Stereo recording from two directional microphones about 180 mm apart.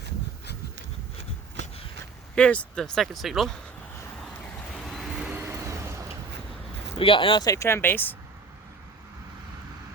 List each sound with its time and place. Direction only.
2.3 s speech: 5° left (ahead or behind)
4.2 s vehicle: 5° left (ahead or behind)
5.3 s vehicle: 15° right (ahead or behind)
6.9 s speech: 30° left (ahead or behind); by 8.1 s 10° left (ahead or behind)